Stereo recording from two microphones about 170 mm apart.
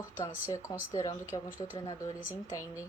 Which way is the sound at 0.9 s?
15° left (ahead or behind).